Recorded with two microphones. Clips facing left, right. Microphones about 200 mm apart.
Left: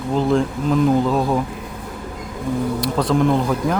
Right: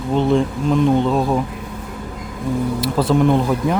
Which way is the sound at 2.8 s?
5° right (ahead or behind).